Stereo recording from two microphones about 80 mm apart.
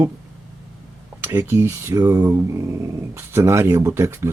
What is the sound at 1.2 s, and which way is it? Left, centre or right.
Speech, right.